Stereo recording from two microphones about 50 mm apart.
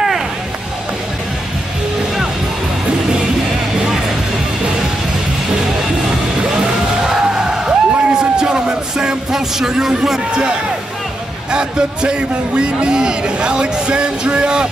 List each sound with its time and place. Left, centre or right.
6.5 s music: centre
11.5 s speech: centre